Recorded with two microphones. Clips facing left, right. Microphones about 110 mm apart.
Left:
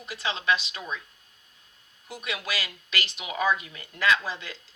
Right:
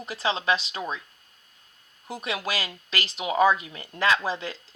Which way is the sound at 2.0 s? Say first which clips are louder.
Right 4 dB; 30° right (ahead or behind).